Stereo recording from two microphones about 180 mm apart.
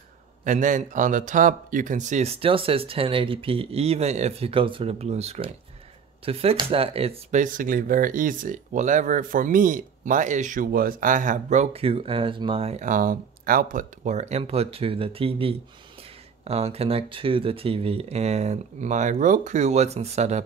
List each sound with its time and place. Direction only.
0.4 s speech: 45° right (ahead or behind)